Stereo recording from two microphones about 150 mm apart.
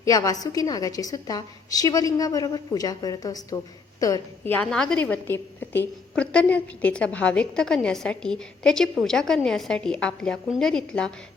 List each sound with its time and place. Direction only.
0.0 s a woman's voice: 25° left (ahead or behind)
4.5 s a woman's voice: 5° left (ahead or behind)